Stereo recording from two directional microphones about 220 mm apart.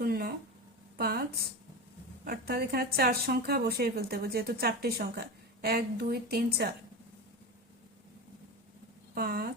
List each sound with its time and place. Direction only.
0.0 s a sound: 40° right (ahead or behind)
0.9 s a woman's voice: 45° right (ahead or behind)
2.2 s a woman's voice: 45° right (ahead or behind)
9.1 s a woman's voice: 45° right (ahead or behind)